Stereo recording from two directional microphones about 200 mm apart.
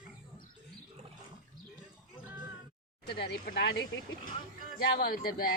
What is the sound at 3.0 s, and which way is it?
Speech, 55° left (ahead or behind).